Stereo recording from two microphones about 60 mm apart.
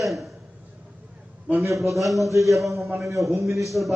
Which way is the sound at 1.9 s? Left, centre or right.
Centre.